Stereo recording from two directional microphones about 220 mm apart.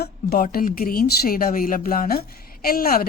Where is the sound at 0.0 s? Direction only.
40° left (ahead or behind).